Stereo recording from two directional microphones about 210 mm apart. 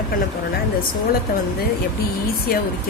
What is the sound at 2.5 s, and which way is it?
Speech, 45° left (ahead or behind).